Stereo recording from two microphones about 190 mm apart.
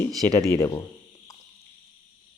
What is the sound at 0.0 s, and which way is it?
Speech, 15° left (ahead or behind).